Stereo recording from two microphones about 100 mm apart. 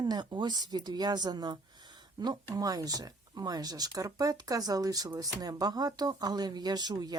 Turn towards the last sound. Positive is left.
turn(degrees=-40)  # may be behind; listen again after turning